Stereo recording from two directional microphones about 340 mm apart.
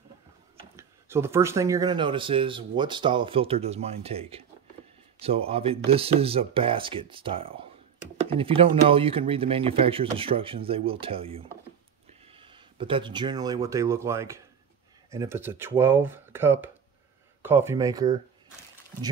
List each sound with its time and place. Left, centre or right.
0.6 s speech: centre